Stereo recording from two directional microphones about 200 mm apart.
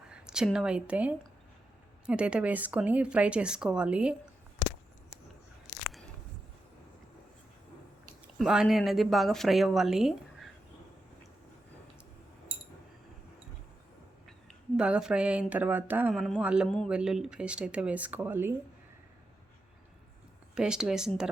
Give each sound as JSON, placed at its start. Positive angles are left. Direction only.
{"t": 0.1, "sound": "speech", "side_deg": -5}
{"t": 8.4, "sound": "speech", "side_deg": 0}
{"t": 14.8, "sound": "speech", "side_deg": -5}
{"t": 20.6, "sound": "speech", "side_deg": -5}